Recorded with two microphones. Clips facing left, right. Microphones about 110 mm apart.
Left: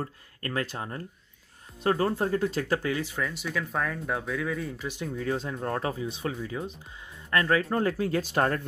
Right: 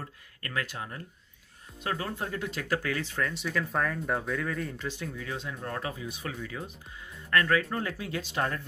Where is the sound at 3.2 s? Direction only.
5° left (ahead or behind).